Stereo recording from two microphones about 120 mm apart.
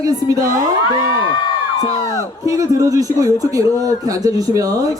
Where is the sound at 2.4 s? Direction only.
25° right (ahead or behind).